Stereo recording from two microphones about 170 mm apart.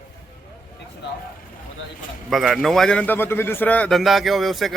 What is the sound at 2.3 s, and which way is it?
Speech, centre (ahead or behind).